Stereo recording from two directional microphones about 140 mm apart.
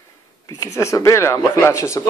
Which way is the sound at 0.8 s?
20° left (ahead or behind).